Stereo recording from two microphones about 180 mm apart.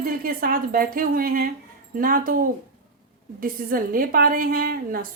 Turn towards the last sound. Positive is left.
turn(degrees=-55)  # may be behind; listen again after turning